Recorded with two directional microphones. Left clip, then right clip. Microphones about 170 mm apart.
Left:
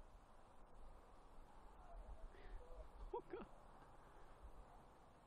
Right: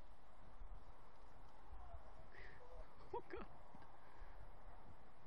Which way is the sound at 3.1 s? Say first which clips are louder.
Even; 10° left (ahead or behind).